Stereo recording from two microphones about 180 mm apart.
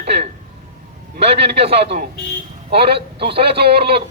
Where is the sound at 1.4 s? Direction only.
65° right (ahead or behind).